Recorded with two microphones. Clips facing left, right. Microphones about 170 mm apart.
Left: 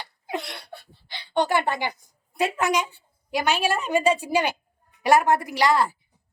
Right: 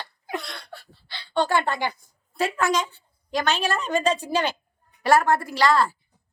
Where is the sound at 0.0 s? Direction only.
20° left (ahead or behind).